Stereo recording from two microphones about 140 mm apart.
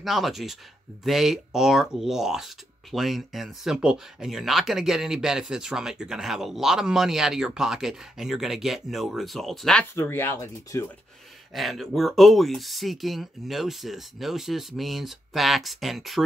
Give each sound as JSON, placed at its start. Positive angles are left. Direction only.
{"t": 0.0, "sound": "speech", "side_deg": 0}
{"t": 9.9, "sound": "speech", "side_deg": 15}
{"t": 11.5, "sound": "speech", "side_deg": 0}